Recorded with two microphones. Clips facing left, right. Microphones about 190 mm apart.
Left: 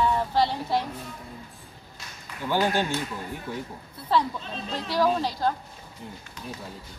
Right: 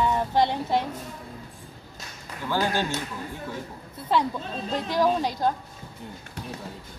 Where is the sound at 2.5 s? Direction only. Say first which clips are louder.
Left 1 dB; 15° left (ahead or behind).